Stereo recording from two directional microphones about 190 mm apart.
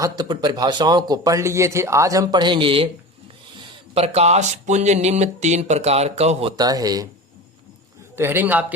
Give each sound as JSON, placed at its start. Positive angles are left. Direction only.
{"t": 0.0, "sound": "speech", "side_deg": -20}
{"t": 6.6, "sound": "speech", "side_deg": -20}
{"t": 8.1, "sound": "a man's voice", "side_deg": -10}